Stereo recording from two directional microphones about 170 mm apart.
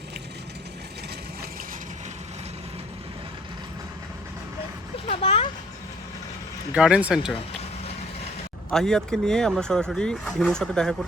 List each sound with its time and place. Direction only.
5.0 s a sound: 35° left (ahead or behind)
6.7 s speech: 5° right (ahead or behind)
8.7 s speech: 5° left (ahead or behind)